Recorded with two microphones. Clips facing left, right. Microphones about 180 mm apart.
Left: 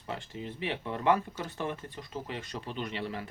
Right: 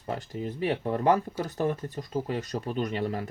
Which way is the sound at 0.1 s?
40° right (ahead or behind).